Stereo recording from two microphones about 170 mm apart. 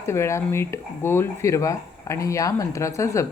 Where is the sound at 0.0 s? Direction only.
15° left (ahead or behind).